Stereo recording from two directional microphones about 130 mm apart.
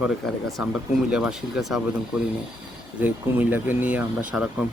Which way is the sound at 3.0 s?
15° right (ahead or behind).